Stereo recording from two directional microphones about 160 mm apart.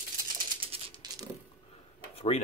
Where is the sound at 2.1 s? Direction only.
40° left (ahead or behind).